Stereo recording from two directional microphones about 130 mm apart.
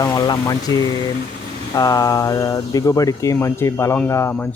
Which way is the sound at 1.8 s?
25° left (ahead or behind).